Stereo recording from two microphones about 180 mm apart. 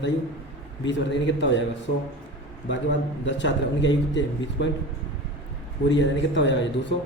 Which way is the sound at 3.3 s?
85° left.